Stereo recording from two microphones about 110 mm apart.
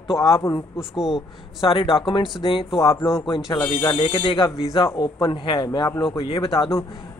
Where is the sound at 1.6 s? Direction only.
55° left (ahead or behind).